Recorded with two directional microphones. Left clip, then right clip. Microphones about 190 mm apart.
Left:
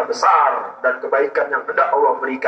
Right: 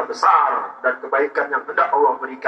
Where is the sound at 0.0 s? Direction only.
45° left (ahead or behind).